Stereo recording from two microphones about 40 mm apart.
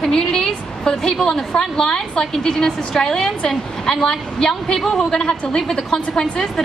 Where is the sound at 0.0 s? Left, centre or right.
Centre.